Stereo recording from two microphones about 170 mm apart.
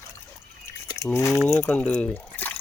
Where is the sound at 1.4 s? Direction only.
10° left (ahead or behind).